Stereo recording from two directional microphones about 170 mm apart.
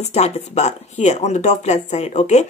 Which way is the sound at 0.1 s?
40° left (ahead or behind).